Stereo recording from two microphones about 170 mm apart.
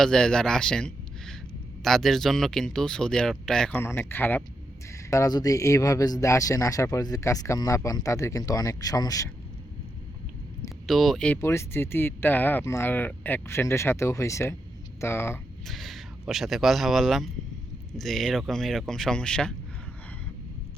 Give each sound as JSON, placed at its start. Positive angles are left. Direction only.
{"t": 0.0, "sound": "speech", "side_deg": 5}
{"t": 10.8, "sound": "speech", "side_deg": 0}
{"t": 11.3, "sound": "speech", "side_deg": 15}
{"t": 15.6, "sound": "speech", "side_deg": 0}